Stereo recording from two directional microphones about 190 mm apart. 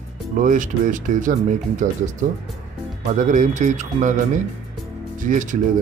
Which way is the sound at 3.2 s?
40° right (ahead or behind).